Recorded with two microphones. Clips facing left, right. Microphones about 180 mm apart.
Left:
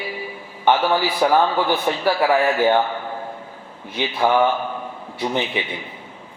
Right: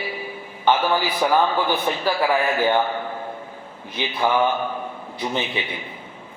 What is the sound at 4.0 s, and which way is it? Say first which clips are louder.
Speech: left 3 dB; 20° left (ahead or behind).